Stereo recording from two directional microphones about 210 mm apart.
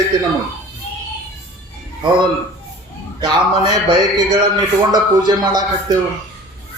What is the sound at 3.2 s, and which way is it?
Speech, 20° right (ahead or behind).